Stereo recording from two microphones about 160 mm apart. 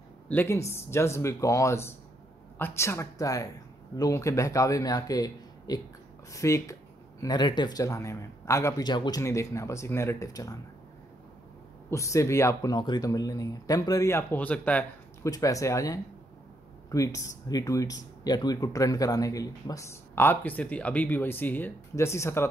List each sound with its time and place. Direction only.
0.3 s speech: 15° left (ahead or behind)
11.9 s speech: 20° left (ahead or behind)
15.2 s speech: 20° left (ahead or behind)